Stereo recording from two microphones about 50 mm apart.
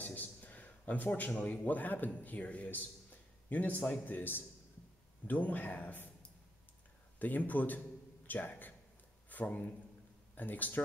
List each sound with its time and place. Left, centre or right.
0.0 s a man's voice: left
7.2 s speech: left